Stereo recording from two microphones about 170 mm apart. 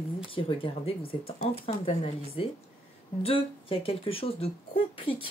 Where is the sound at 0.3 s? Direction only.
30° left (ahead or behind).